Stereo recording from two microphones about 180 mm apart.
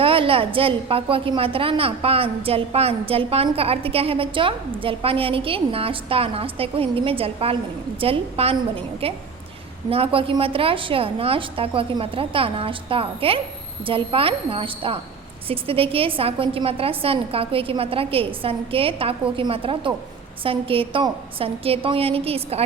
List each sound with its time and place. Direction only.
0.0 s a woman's voice: 30° right (ahead or behind)